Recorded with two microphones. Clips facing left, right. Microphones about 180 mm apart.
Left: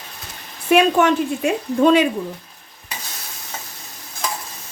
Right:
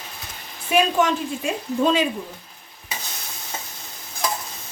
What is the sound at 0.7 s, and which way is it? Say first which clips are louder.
A woman's voice: left 5 dB; 65° left (ahead or behind).